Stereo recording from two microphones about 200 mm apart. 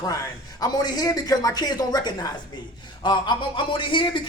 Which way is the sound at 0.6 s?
20° left (ahead or behind).